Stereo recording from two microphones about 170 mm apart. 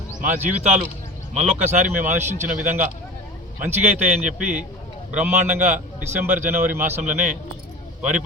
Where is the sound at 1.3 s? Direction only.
40° right (ahead or behind).